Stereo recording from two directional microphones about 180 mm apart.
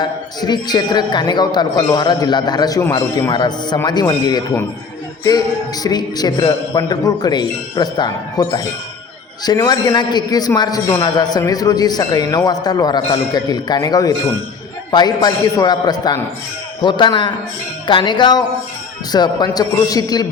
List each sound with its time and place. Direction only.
0.0 s a man's voice: 25° left (ahead or behind)
5.8 s a man's voice: 20° left (ahead or behind)